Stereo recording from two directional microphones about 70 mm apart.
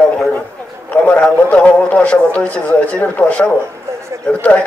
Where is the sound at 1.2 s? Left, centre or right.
Centre.